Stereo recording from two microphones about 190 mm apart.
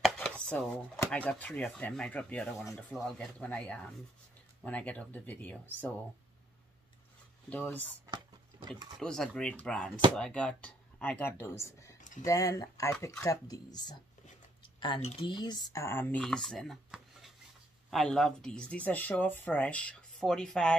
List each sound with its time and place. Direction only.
0.2 s speech: 5° left (ahead or behind)
7.4 s speech: 5° left (ahead or behind)
8.1 s a sound: 25° right (ahead or behind)
9.0 s speech: 5° left (ahead or behind)
12.0 s a sound: 40° left (ahead or behind)
12.3 s speech: 15° left (ahead or behind)